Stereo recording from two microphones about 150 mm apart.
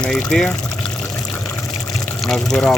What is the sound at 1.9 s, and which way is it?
Pour, centre (ahead or behind).